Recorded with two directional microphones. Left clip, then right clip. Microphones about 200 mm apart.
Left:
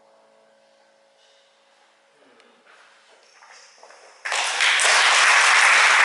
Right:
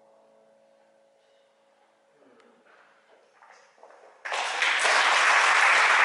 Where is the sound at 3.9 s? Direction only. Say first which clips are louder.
Left 6 dB; 10° right (ahead or behind).